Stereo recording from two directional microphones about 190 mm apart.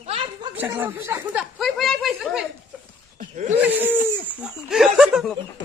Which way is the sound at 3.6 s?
10° right (ahead or behind).